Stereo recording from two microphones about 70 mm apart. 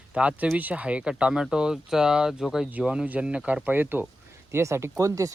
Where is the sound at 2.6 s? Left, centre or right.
Centre.